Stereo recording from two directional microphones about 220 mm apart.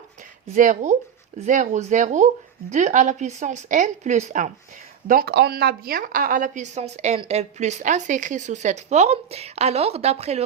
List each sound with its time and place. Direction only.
0.4 s a woman's voice: 35° right (ahead or behind)